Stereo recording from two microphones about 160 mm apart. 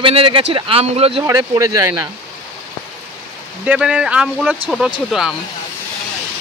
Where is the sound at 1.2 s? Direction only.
20° right (ahead or behind).